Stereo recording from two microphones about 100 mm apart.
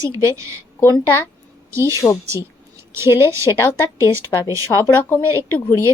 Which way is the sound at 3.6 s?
25° left (ahead or behind).